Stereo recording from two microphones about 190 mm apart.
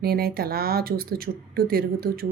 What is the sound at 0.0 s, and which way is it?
Speech, 55° right (ahead or behind).